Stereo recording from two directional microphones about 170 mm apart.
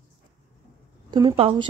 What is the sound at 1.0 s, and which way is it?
Speech, 30° right (ahead or behind).